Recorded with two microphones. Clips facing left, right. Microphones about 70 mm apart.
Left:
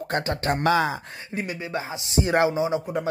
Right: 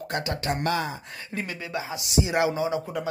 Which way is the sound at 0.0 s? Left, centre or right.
Left.